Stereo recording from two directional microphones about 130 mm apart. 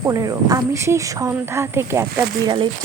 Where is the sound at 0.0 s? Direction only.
25° right (ahead or behind).